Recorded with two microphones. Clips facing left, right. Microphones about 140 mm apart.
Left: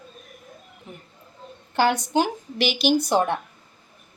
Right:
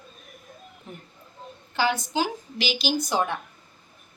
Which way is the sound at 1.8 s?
60° left (ahead or behind).